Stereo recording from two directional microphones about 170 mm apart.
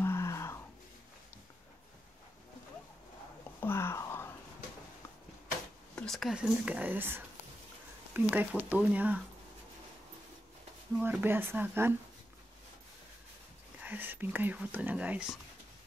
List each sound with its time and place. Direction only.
0.0 s a sound: 15° left (ahead or behind)
3.6 s whispering: 15° left (ahead or behind)
5.9 s speech: centre (ahead or behind)
11.0 s speech: 10° right (ahead or behind)
13.8 s speech: 10° right (ahead or behind)